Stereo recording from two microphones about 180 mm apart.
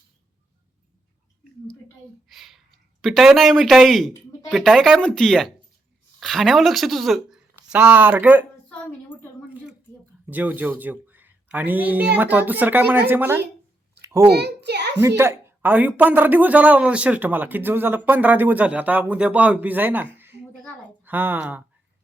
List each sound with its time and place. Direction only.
2.3 s speech: centre (ahead or behind)
10.2 s speech: 10° right (ahead or behind)
14.0 s babbling: 15° right (ahead or behind)
14.3 s a child's voice: 65° right (ahead or behind)
15.0 s a woman's voice: 15° right (ahead or behind)